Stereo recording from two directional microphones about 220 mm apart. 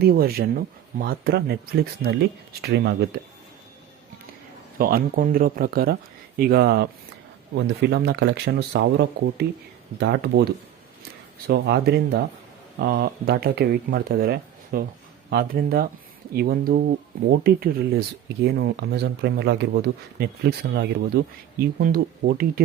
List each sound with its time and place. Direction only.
0.0 s speech: 45° right (ahead or behind)
4.8 s speech: 40° right (ahead or behind)